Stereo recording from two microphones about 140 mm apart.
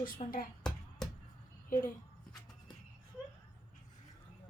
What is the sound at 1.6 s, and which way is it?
Speech, 70° left (ahead or behind).